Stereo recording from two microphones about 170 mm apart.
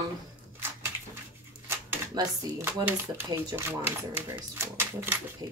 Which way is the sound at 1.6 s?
15° right (ahead or behind).